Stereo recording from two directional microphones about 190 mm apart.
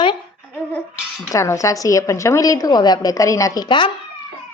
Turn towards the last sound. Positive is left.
turn(degrees=25)  # may be behind; listen again after turning